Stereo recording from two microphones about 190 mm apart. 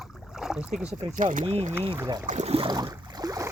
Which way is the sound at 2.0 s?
15° right (ahead or behind).